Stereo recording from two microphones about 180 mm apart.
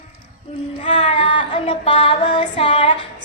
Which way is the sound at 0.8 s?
40° left (ahead or behind).